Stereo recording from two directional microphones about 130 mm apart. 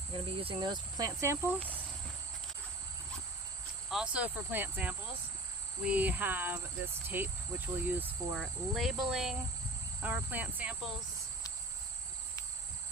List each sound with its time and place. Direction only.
0.1 s speech: 45° right (ahead or behind); by 1.5 s 20° right (ahead or behind)
3.8 s speech: 5° right (ahead or behind)
8.4 s insect: centre (ahead or behind)
10.0 s speech: 15° right (ahead or behind)